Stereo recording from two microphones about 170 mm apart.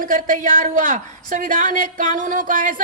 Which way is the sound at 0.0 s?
50° right (ahead or behind).